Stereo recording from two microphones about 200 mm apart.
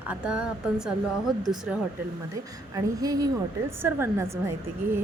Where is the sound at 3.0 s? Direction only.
20° right (ahead or behind).